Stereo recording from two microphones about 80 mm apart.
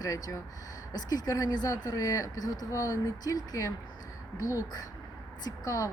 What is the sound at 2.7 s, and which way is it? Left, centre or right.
Speech, left.